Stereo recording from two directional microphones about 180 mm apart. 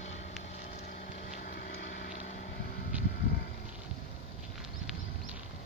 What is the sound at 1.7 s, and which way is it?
Vehicle, 55° left (ahead or behind).